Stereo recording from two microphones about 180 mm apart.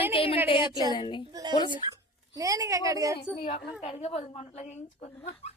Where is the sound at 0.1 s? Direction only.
30° left (ahead or behind).